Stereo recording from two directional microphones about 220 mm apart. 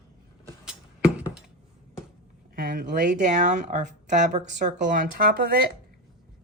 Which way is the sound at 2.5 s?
40° right (ahead or behind).